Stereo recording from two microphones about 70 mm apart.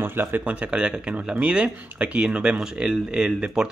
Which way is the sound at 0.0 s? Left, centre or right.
Right.